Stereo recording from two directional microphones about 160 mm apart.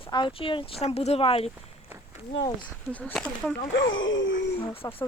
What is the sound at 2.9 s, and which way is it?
Speech, 10° left (ahead or behind).